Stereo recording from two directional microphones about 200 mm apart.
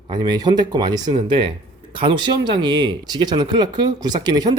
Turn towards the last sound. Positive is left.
turn(degrees=-20)  # may be behind; listen again after turning